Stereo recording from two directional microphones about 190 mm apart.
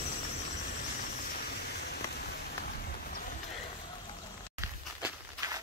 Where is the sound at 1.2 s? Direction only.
55° left (ahead or behind).